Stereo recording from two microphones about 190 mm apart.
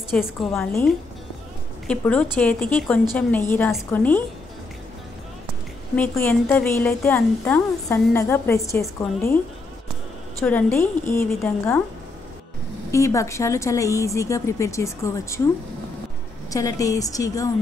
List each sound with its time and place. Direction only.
0.1 s a woman's voice: 5° left (ahead or behind)
5.9 s speech: 10° left (ahead or behind)
10.4 s speech: 5° left (ahead or behind)
12.9 s speech: 15° left (ahead or behind)
16.4 s speech: 20° left (ahead or behind)